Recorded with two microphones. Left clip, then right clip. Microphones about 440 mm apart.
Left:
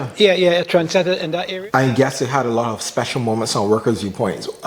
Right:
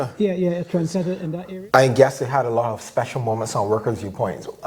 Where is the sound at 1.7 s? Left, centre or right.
Right.